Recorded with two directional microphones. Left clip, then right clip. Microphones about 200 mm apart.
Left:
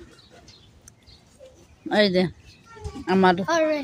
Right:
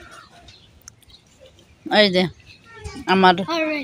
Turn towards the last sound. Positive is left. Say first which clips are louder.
# left 1 dB
turn(degrees=5)  # may be behind; listen again after turning